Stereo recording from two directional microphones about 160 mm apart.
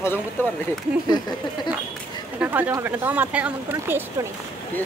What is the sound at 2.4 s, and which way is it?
Speech, 10° right (ahead or behind).